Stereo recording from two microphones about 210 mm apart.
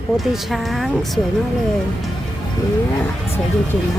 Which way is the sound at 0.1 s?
Centre (ahead or behind).